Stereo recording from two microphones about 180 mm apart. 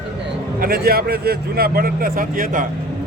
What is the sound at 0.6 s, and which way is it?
Speech, 55° right (ahead or behind).